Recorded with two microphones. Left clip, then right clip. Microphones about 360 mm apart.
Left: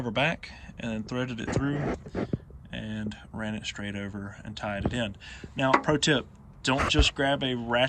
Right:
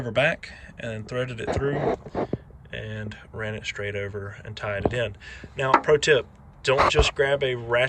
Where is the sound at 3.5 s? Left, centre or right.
Centre.